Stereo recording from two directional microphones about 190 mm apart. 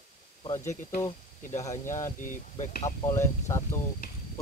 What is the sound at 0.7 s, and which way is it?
Speech, 45° left (ahead or behind).